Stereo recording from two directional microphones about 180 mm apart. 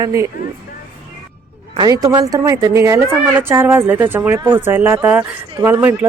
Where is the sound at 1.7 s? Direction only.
20° right (ahead or behind).